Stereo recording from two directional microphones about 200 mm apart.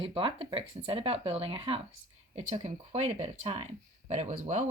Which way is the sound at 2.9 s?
35° right (ahead or behind).